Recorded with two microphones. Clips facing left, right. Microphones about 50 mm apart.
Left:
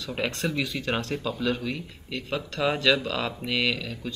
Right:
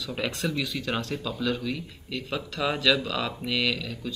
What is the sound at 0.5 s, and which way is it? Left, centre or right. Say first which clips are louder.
Speech: left 1 dB; centre.